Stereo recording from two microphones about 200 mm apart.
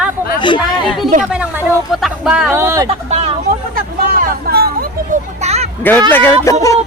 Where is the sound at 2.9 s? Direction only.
30° right (ahead or behind).